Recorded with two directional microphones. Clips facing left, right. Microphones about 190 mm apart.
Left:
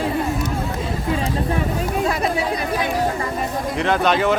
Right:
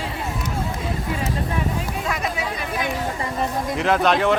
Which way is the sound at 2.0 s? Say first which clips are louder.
Left 5 dB; 35° left (ahead or behind).